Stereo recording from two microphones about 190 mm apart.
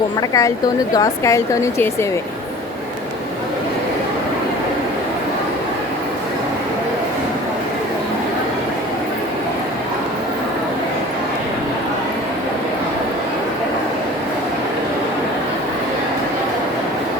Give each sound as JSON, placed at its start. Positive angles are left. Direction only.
{"t": 0.2, "sound": "a woman's voice", "side_deg": 15}